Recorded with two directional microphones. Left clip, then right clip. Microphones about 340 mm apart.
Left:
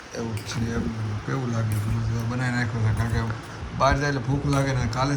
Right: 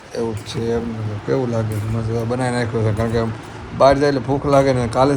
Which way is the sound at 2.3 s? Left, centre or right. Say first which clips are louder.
Right 6 dB; centre.